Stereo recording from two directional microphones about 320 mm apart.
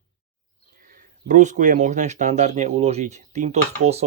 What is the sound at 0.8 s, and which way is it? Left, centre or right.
Speech, right.